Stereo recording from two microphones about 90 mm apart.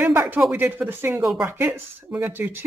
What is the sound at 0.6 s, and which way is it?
Speech, 20° right (ahead or behind).